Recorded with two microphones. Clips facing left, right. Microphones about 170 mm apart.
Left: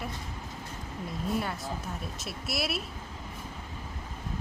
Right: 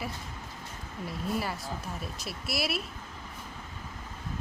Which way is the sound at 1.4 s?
5° right (ahead or behind).